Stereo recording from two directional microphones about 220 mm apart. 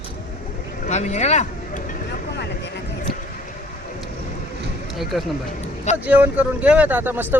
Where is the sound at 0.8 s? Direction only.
30° left (ahead or behind).